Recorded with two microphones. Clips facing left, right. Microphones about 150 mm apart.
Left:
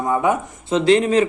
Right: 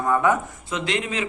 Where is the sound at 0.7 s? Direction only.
35° left (ahead or behind).